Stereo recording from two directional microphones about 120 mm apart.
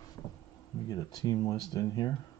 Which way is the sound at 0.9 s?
30° left (ahead or behind).